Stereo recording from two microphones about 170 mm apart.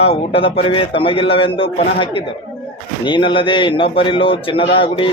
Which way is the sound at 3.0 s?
30° left (ahead or behind).